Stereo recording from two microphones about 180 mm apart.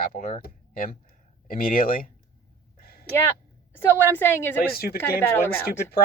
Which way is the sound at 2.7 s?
60° left (ahead or behind).